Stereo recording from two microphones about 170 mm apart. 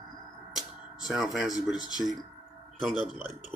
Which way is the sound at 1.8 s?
25° left (ahead or behind).